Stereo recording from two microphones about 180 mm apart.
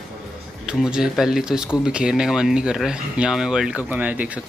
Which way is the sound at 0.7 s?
5° right (ahead or behind).